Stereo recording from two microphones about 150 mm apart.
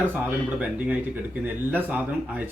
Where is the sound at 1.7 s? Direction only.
10° right (ahead or behind).